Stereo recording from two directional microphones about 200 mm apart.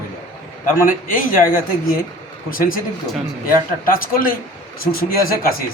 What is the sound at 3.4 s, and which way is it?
A man's voice, 45° left (ahead or behind).